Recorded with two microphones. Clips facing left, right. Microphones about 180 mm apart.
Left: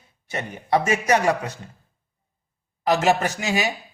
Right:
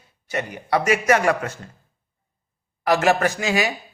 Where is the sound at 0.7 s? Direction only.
20° left (ahead or behind).